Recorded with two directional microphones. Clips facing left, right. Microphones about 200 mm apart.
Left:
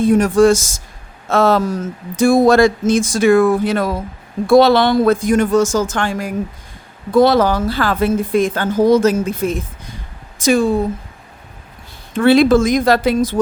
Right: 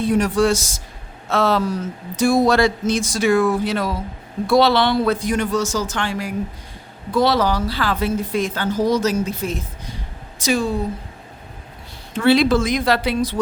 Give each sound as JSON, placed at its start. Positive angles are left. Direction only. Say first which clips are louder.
{"t": 0.0, "sound": "a woman's voice", "louder": "left 6 dB", "side_deg": 50}
{"t": 12.1, "sound": "a woman's voice", "louder": "left 5 dB", "side_deg": 50}